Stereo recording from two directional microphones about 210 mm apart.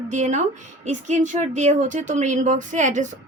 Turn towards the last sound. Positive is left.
turn(degrees=-35)  # may be behind; listen again after turning